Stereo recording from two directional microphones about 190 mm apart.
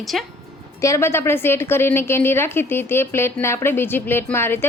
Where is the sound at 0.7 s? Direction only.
15° left (ahead or behind).